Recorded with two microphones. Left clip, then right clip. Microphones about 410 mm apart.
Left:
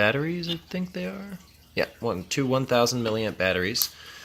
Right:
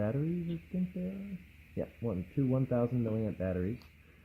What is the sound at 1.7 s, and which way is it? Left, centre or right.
Speech, centre.